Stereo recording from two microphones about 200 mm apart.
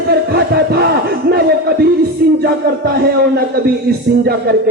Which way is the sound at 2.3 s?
50° right (ahead or behind).